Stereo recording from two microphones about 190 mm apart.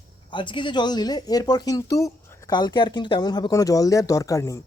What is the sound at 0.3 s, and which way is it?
Speech, 25° left (ahead or behind).